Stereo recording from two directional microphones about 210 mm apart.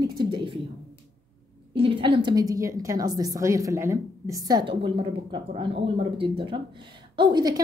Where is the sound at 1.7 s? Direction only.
25° right (ahead or behind).